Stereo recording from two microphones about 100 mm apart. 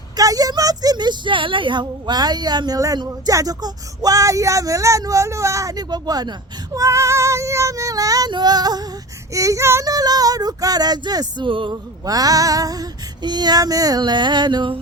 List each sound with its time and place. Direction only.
0.2 s a woman's voice: 40° right (ahead or behind)
6.7 s a woman's voice: 30° right (ahead or behind)
9.8 s a woman's voice: 40° right (ahead or behind); by 11.7 s 55° right (ahead or behind)
11.7 s a woman's voice: 40° right (ahead or behind)